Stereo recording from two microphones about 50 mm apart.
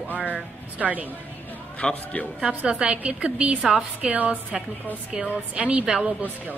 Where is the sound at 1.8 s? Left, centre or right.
Left.